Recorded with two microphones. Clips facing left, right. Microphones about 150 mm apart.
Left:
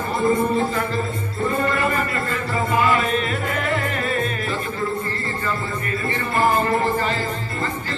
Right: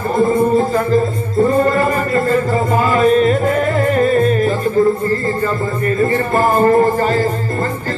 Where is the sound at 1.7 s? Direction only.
40° right (ahead or behind).